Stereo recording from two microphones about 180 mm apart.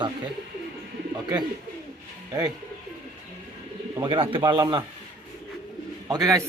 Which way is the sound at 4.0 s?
25° right (ahead or behind).